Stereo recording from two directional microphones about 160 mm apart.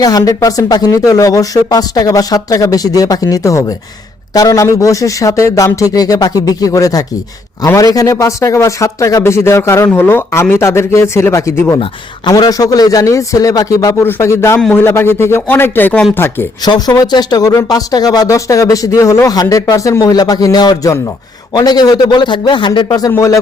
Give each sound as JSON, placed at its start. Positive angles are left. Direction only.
{"t": 0.0, "sound": "a man's voice", "side_deg": 25}
{"t": 11.8, "sound": "a man's voice", "side_deg": 25}